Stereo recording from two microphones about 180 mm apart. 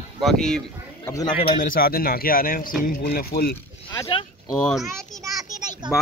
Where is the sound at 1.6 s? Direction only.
55° left (ahead or behind).